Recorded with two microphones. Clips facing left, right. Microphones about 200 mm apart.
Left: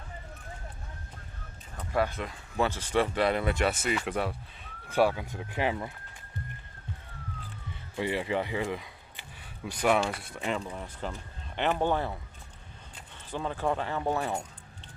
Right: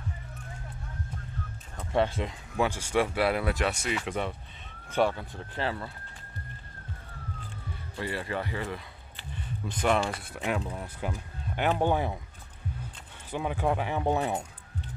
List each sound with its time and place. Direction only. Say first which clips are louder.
1.9 s speech: right 2 dB; 25° right (ahead or behind)
2.5 s speech: even; 10° right (ahead or behind); by 5.9 s 15° left (ahead or behind)
7.9 s speech: left 4 dB; 15° left (ahead or behind)
9.8 s speech: left 1 dB; centre (ahead or behind); by 12.2 s 15° right (ahead or behind)
13.3 s speech: right 2 dB; 15° right (ahead or behind)